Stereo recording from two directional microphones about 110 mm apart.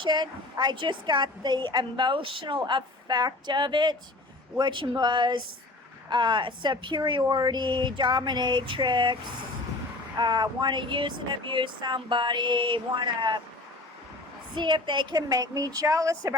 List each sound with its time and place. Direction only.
0.0 s a woman's voice: 45° right (ahead or behind)
10.2 s a woman's voice: 40° right (ahead or behind)
14.5 s a woman's voice: 45° right (ahead or behind)